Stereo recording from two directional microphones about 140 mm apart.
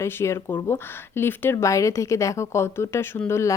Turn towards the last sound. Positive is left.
turn(degrees=20)  # may be behind; listen again after turning